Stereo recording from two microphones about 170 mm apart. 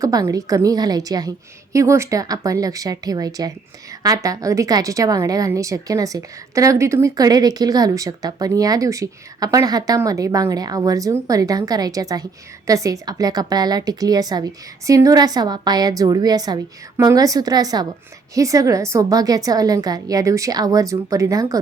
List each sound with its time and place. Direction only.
0.0 s a woman's voice: 20° right (ahead or behind)